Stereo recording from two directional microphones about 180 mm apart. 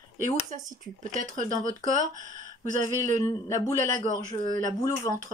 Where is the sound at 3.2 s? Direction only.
15° left (ahead or behind).